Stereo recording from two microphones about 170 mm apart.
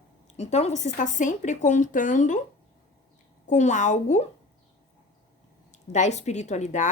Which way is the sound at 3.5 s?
45° left (ahead or behind).